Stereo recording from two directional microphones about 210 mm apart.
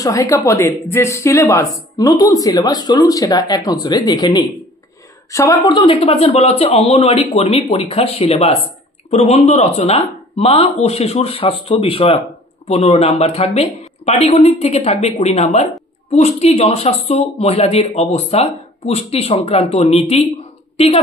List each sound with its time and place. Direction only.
0.0 s a woman's voice: 15° left (ahead or behind)